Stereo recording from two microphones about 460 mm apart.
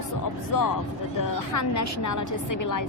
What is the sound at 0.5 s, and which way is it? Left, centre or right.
A woman's voice, left.